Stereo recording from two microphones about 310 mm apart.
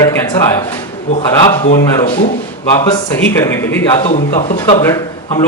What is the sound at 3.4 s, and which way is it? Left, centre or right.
Speech, centre.